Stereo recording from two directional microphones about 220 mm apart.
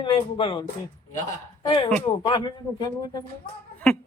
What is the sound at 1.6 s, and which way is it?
Speech, 20° left (ahead or behind).